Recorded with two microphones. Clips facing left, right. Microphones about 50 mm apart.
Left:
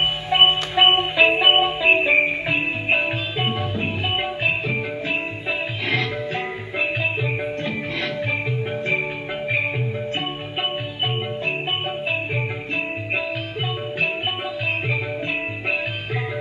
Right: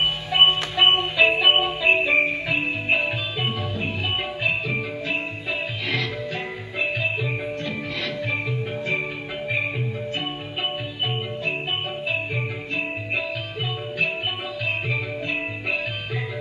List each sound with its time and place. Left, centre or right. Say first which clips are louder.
0.0 s music: left 1 dB; centre
1.9 s music: left 1 dB; centre
12.1 s music: even; centre